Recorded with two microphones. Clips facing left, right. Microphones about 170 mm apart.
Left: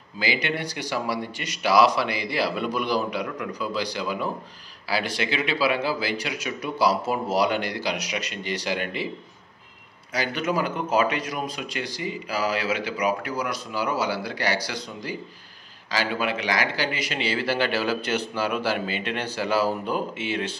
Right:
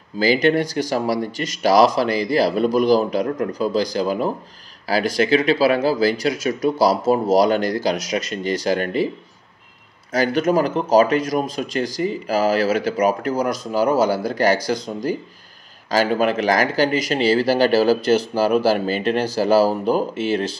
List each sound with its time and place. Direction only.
0.2 s speech: 45° right (ahead or behind)
10.1 s speech: 45° right (ahead or behind)